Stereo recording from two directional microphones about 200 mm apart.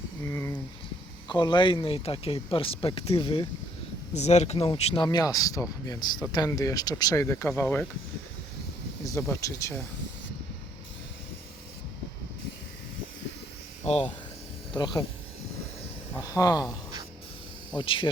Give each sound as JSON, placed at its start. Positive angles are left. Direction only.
{"t": 0.3, "sound": "speech", "side_deg": 15}
{"t": 4.1, "sound": "speech", "side_deg": 35}
{"t": 9.0, "sound": "speech", "side_deg": 15}
{"t": 13.8, "sound": "speech", "side_deg": 30}
{"t": 16.1, "sound": "speech", "side_deg": 15}